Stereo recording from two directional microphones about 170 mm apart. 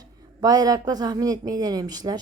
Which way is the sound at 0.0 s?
25° right (ahead or behind).